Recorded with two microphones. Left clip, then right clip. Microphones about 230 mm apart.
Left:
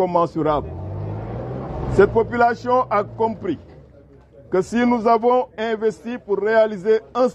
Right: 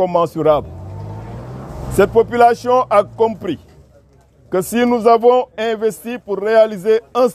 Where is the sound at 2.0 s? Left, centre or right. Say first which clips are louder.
Right 4 dB; right.